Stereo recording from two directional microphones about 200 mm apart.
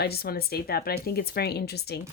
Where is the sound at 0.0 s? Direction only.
50° left (ahead or behind).